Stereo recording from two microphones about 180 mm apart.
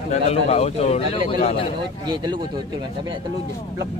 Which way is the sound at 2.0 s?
25° right (ahead or behind).